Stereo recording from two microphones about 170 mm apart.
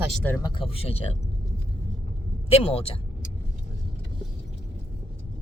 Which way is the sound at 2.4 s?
35° left (ahead or behind).